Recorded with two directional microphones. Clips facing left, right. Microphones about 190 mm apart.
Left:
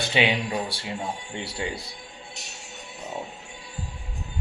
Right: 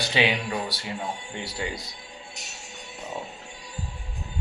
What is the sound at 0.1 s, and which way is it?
Speech, 25° left (ahead or behind).